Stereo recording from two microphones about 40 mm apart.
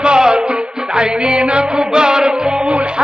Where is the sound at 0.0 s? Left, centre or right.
Right.